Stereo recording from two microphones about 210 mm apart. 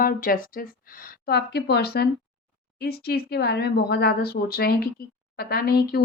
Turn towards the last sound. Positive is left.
turn(degrees=45)  # may be behind; listen again after turning